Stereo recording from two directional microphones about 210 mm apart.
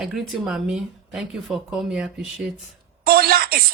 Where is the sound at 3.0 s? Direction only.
45° right (ahead or behind).